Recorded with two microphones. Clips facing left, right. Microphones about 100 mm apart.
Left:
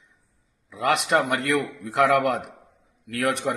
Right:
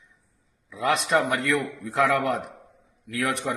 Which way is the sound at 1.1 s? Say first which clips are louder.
Left 1 dB; 55° left (ahead or behind).